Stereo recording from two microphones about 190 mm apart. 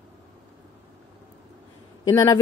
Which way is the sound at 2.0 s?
15° left (ahead or behind).